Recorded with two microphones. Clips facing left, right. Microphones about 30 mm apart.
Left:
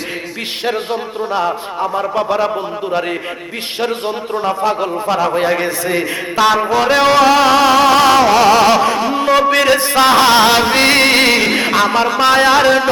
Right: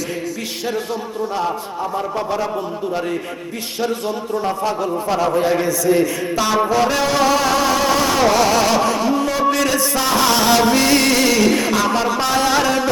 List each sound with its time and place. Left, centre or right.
0.6 s music: left
1.3 s a man's voice: left
3.8 s music: left
4.7 s a man's voice: left
7.3 s music: left